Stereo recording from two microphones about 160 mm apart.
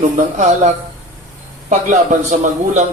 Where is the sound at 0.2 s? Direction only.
50° right (ahead or behind).